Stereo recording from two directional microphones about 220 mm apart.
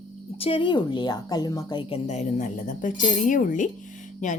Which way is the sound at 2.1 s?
35° left (ahead or behind).